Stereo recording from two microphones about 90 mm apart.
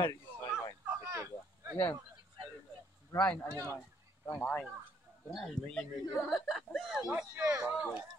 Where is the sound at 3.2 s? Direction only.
15° left (ahead or behind).